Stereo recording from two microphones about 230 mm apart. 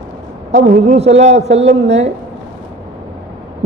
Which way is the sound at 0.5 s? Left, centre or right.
Right.